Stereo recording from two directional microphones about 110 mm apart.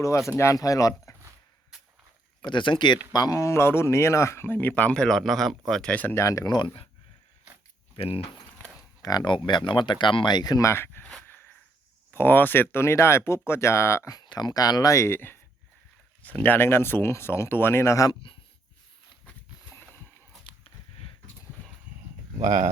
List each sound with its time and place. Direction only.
0.0 s speech: 25° left (ahead or behind)
2.4 s speech: 45° left (ahead or behind); by 6.1 s 10° left (ahead or behind)
6.1 s speech: 30° left (ahead or behind)
6.5 s speech: 45° left (ahead or behind)
7.9 s speech: 55° left (ahead or behind)
9.0 s speech: 35° left (ahead or behind); by 11.0 s 20° left (ahead or behind)
11.0 s a sound: 10° left (ahead or behind)
12.1 s speech: 20° left (ahead or behind)
14.2 s speech: 40° left (ahead or behind)
18.1 s speech: 50° left (ahead or behind)
20.4 s a sound: 50° left (ahead or behind)
22.4 s speech: 90° right